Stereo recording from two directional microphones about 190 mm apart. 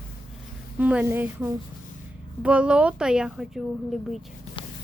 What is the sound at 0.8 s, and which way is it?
Speech, 10° right (ahead or behind).